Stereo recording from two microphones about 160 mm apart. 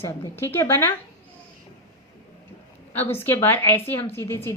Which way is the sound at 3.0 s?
15° left (ahead or behind).